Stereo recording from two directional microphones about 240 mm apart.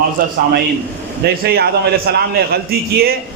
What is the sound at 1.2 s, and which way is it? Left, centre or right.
A man's voice, right.